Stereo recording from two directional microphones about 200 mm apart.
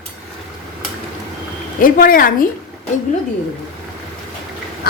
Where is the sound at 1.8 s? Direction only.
45° left (ahead or behind).